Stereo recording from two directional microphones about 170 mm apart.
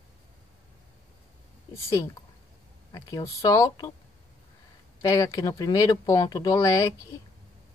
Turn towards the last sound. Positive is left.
turn(degrees=20)  # may be behind; listen again after turning